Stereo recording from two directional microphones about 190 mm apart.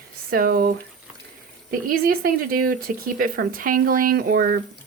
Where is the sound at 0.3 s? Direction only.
50° right (ahead or behind).